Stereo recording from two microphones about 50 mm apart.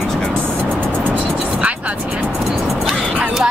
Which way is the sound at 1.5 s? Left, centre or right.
Right.